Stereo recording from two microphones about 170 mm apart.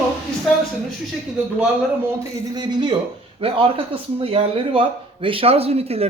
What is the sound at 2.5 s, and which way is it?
A man's voice, 25° right (ahead or behind).